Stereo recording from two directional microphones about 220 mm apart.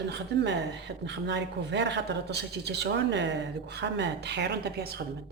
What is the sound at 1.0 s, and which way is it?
Speech, 50° right (ahead or behind).